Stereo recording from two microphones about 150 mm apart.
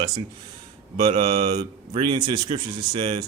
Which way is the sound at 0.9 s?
35° right (ahead or behind).